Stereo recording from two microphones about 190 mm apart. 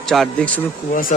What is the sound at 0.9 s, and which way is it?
Speech, 45° left (ahead or behind).